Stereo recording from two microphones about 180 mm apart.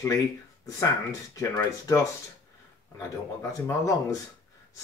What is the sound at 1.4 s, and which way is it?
Speech, 15° left (ahead or behind).